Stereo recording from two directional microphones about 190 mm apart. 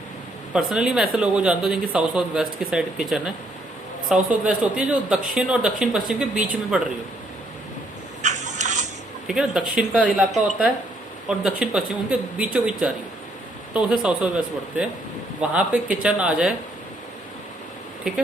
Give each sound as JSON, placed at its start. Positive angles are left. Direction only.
{"t": 0.5, "sound": "speech", "side_deg": -5}
{"t": 8.2, "sound": "a sound", "side_deg": -40}
{"t": 9.2, "sound": "speech", "side_deg": -5}